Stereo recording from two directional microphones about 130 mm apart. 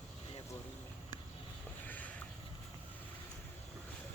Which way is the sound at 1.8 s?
10° left (ahead or behind).